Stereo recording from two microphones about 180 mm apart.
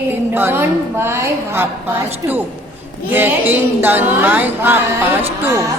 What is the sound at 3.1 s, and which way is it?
A woman's voice, 10° right (ahead or behind).